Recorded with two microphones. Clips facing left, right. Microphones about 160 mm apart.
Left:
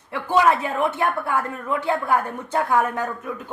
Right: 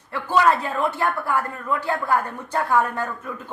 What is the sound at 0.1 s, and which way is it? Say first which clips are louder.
Speech: left 1 dB; 15° left (ahead or behind).